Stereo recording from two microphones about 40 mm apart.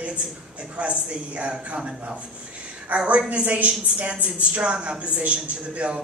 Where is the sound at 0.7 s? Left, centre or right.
Right.